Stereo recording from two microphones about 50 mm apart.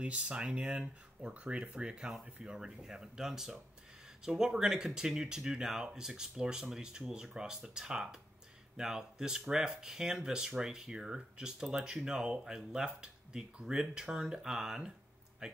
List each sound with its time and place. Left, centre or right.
0.0 s speech: right
2.5 s speech: centre